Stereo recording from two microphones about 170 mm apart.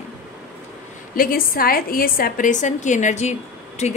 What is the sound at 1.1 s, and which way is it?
A woman's voice, 55° left (ahead or behind).